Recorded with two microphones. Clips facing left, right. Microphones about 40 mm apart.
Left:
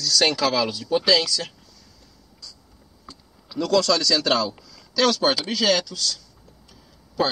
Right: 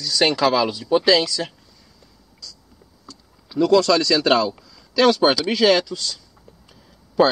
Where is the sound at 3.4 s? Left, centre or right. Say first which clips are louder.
Right 5 dB; centre.